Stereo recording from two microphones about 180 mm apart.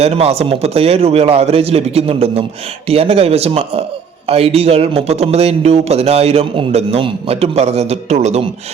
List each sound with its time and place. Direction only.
0.0 s speech: 35° right (ahead or behind)